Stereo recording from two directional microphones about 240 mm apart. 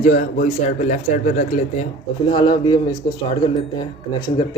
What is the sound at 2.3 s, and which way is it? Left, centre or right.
Speech, centre.